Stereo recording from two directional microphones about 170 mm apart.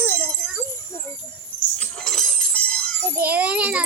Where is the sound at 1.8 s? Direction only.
5° left (ahead or behind).